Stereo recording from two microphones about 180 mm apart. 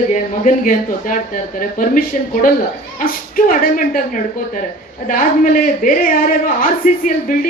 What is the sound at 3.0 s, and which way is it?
Speech, 50° left (ahead or behind).